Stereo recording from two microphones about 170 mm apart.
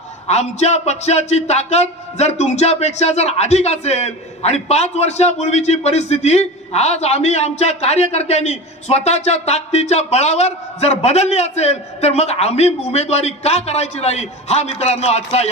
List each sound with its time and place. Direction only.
0.3 s a man's voice: 40° left (ahead or behind)